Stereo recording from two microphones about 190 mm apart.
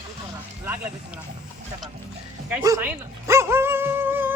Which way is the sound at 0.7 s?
5° right (ahead or behind).